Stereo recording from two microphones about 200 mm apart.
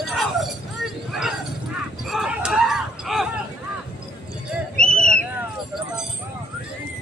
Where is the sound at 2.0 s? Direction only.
5° right (ahead or behind).